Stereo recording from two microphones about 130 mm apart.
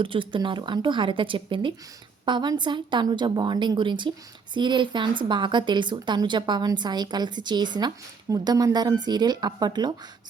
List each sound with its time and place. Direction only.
0.0 s a woman's voice: 40° right (ahead or behind)